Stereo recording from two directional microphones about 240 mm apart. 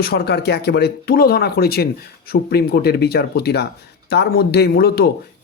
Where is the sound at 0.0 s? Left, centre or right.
Left.